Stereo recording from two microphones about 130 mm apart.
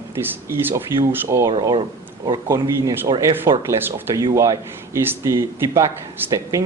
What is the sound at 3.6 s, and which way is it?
A man's voice, 20° right (ahead or behind).